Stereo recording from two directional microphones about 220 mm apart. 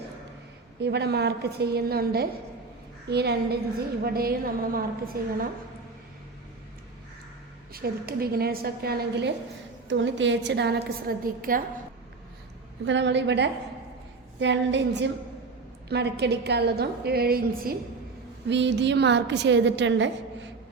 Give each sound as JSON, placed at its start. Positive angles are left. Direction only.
{"t": 0.8, "sound": "a woman's voice", "side_deg": -50}
{"t": 7.7, "sound": "a woman's voice", "side_deg": -45}
{"t": 12.8, "sound": "a woman's voice", "side_deg": -55}
{"t": 18.4, "sound": "a woman's voice", "side_deg": -55}